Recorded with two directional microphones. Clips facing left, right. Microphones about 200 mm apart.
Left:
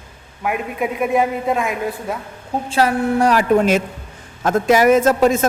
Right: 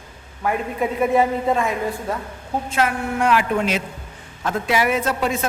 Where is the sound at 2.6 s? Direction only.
35° left (ahead or behind).